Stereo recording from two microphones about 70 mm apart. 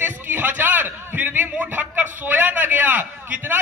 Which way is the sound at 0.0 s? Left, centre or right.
Right.